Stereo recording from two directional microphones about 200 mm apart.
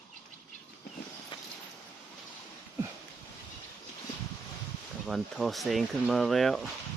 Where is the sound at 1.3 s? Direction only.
25° left (ahead or behind).